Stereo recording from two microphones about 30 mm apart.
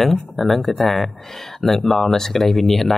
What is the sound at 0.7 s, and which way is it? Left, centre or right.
Speech, left.